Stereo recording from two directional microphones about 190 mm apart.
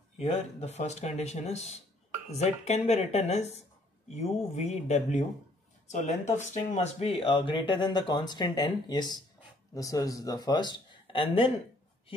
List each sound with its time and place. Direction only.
0.2 s speech: 35° left (ahead or behind)